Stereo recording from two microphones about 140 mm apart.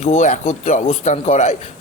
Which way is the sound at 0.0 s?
55° left (ahead or behind).